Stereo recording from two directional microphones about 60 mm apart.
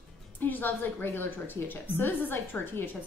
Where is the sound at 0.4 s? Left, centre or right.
Left.